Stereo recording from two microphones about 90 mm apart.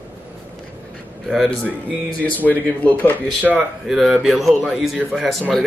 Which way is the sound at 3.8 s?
Centre (ahead or behind).